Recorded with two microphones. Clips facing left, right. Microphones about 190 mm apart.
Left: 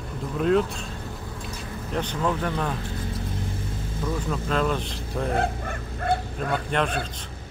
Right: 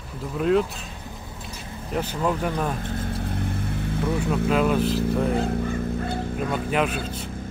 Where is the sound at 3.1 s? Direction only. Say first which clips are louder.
Right 3 dB; 60° right (ahead or behind).